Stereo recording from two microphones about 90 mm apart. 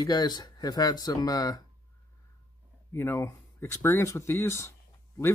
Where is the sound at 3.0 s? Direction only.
30° left (ahead or behind).